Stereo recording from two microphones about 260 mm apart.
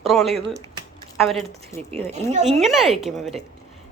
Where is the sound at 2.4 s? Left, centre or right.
Centre.